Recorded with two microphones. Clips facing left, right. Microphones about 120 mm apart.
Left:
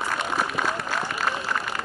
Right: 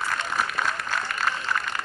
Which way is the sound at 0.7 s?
10° left (ahead or behind).